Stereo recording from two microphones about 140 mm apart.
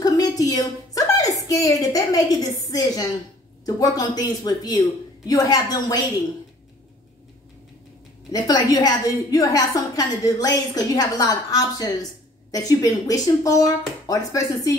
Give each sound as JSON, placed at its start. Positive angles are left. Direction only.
{"t": 0.0, "sound": "a sound", "side_deg": 25}
{"t": 1.5, "sound": "a woman's voice", "side_deg": 25}
{"t": 8.3, "sound": "a woman's voice", "side_deg": 25}